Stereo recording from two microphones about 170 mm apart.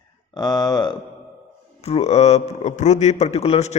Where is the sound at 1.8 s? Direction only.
35° left (ahead or behind).